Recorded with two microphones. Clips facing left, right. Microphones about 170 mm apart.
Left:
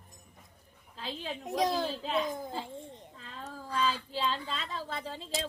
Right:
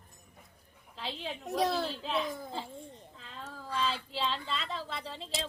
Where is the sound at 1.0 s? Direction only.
45° left (ahead or behind).